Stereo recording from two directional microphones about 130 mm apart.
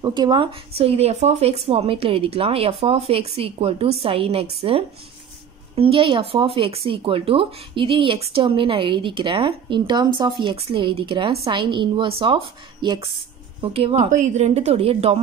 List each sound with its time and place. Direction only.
0.0 s speech: 35° right (ahead or behind)
13.6 s speech: 50° right (ahead or behind)
14.2 s speech: 60° right (ahead or behind)